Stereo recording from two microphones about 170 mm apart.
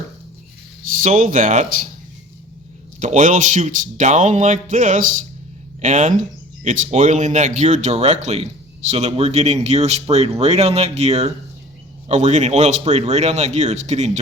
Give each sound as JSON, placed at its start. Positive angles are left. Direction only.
{"t": 0.9, "sound": "speech", "side_deg": -50}
{"t": 3.0, "sound": "speech", "side_deg": -45}